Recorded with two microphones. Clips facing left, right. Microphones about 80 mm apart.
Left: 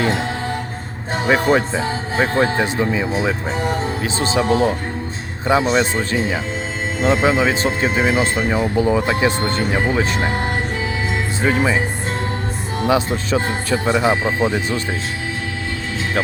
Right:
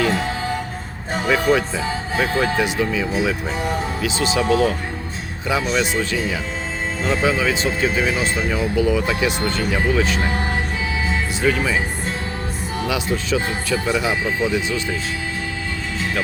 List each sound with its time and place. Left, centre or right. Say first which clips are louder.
1.3 s speech: left 2 dB; left
11.4 s speech: left 2 dB; left
12.9 s speech: left 4 dB; left